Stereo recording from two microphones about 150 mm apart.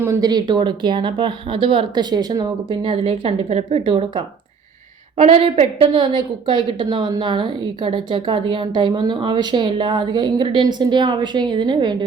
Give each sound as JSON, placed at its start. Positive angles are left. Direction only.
{"t": 0.0, "sound": "a woman's voice", "side_deg": -20}